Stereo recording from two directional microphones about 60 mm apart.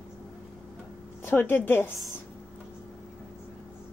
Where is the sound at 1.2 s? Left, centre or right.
Left.